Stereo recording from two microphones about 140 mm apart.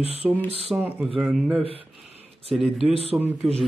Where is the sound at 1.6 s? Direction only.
40° right (ahead or behind).